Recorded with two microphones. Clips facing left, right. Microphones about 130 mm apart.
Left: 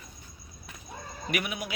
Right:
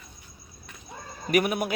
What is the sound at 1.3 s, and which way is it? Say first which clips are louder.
Speech: right 9 dB; 50° right (ahead or behind).